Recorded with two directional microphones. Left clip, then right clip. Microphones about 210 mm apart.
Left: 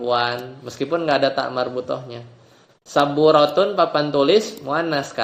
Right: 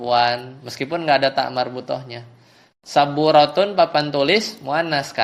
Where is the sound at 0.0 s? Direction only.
25° right (ahead or behind).